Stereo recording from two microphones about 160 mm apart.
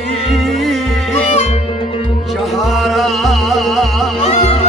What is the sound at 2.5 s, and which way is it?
Music, centre (ahead or behind).